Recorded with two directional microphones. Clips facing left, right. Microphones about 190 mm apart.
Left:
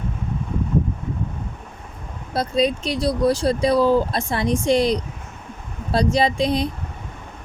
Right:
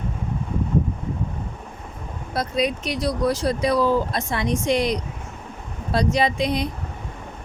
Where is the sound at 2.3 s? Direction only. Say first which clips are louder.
Left 3 dB; 30° left (ahead or behind).